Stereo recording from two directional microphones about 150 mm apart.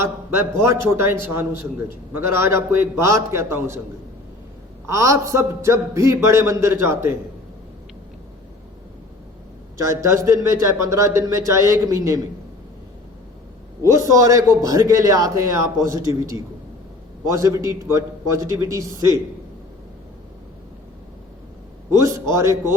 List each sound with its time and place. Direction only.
0.0 s a man's voice: 20° right (ahead or behind)
4.9 s a man's voice: 20° right (ahead or behind)
9.7 s a man's voice: 20° right (ahead or behind)
13.9 s a man's voice: 20° right (ahead or behind)
17.2 s a man's voice: 20° right (ahead or behind)
21.8 s a man's voice: 20° right (ahead or behind)